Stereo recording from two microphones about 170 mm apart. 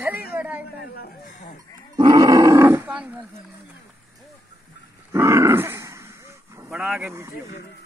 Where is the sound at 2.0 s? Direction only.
25° right (ahead or behind).